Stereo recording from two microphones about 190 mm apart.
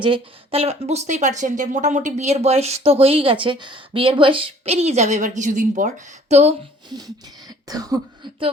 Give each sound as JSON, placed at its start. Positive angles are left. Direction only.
{"t": 0.0, "sound": "speech", "side_deg": -30}
{"t": 7.7, "sound": "speech", "side_deg": -20}